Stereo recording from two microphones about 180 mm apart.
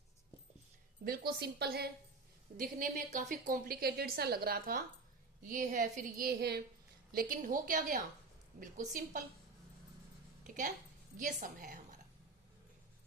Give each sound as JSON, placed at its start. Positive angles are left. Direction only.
{"t": 1.0, "sound": "a woman's voice", "side_deg": -55}
{"t": 2.6, "sound": "a woman's voice", "side_deg": -50}
{"t": 11.2, "sound": "a woman's voice", "side_deg": -45}